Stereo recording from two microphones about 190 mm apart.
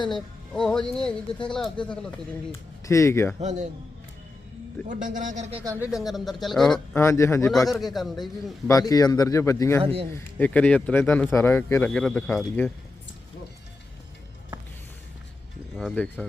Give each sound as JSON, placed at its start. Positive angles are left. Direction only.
{"t": 0.1, "sound": "speech", "side_deg": 5}
{"t": 2.5, "sound": "speech", "side_deg": 15}
{"t": 3.4, "sound": "a man's voice", "side_deg": -40}
{"t": 4.9, "sound": "speech", "side_deg": -45}
{"t": 5.8, "sound": "speech", "side_deg": 0}
{"t": 7.0, "sound": "speech", "side_deg": 15}
{"t": 7.7, "sound": "speech", "side_deg": 0}
{"t": 8.6, "sound": "speech", "side_deg": 20}
{"t": 9.8, "sound": "a man's voice", "side_deg": -30}
{"t": 10.2, "sound": "speech", "side_deg": 10}
{"t": 15.7, "sound": "speech", "side_deg": 5}